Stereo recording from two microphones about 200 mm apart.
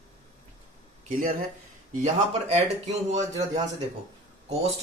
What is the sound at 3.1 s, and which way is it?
Speech, 35° right (ahead or behind).